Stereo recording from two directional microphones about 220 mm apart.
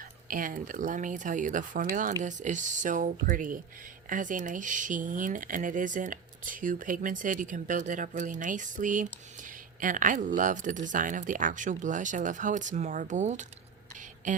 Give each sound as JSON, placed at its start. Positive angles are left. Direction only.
{"t": 0.3, "sound": "speech", "side_deg": -40}